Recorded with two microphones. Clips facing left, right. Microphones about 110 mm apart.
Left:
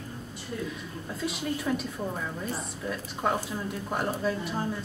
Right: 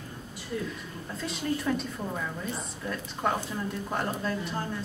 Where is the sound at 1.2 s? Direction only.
5° left (ahead or behind).